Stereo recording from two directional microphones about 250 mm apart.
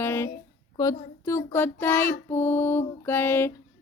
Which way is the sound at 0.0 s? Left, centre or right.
Centre.